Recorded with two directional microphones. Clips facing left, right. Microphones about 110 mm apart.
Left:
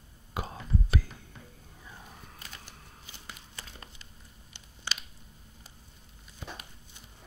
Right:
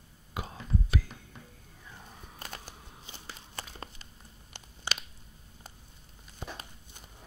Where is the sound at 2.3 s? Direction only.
45° right (ahead or behind).